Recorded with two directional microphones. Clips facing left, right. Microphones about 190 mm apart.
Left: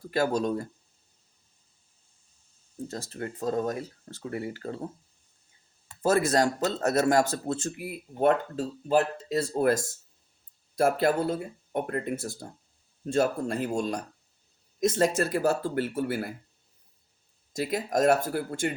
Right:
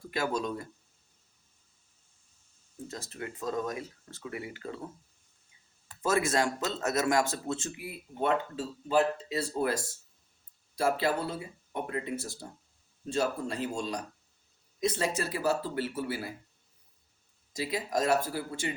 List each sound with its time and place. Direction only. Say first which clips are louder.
0.1 s speech: left 6 dB; 40° left (ahead or behind)
2.7 s speech: left 5 dB; 35° left (ahead or behind)
5.9 s speech: left 4 dB; 35° left (ahead or behind); by 16.3 s 55° left (ahead or behind)
17.5 s speech: left 4 dB; 50° left (ahead or behind)